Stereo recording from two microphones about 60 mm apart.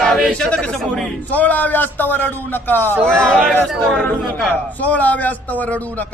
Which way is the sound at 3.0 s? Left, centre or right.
Centre.